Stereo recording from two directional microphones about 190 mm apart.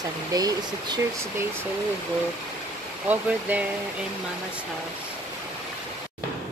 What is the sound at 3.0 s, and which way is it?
Speech, 10° right (ahead or behind).